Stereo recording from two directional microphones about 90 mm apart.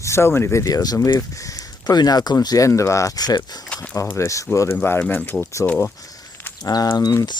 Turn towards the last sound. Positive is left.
turn(degrees=50)  # may be behind; listen again after turning